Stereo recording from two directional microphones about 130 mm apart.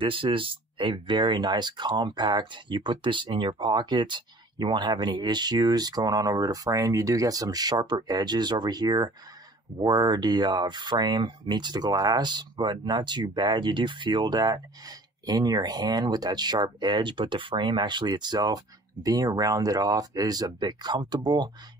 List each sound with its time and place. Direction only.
0.0 s speech: 40° right (ahead or behind)